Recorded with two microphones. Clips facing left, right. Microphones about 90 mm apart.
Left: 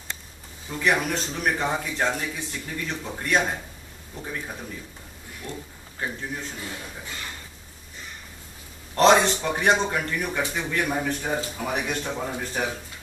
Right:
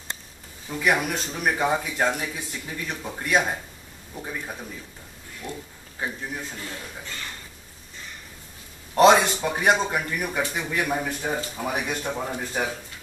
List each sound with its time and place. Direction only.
0.7 s a man's voice: 5° right (ahead or behind)
6.6 s a man's voice: 10° left (ahead or behind)
8.9 s a man's voice: 10° right (ahead or behind)